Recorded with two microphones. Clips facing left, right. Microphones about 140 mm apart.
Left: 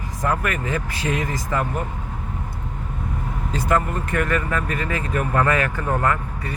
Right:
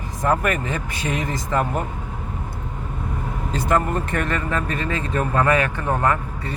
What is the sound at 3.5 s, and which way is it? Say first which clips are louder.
Speech: right 1 dB; 25° right (ahead or behind).